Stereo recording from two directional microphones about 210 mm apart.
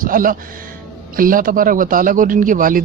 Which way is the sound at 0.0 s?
40° right (ahead or behind).